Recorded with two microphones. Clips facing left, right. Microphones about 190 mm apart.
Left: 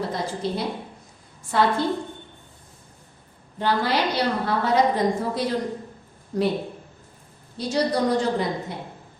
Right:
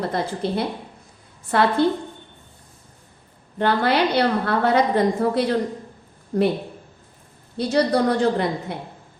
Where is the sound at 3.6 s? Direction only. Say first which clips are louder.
Right 4 dB; 60° right (ahead or behind).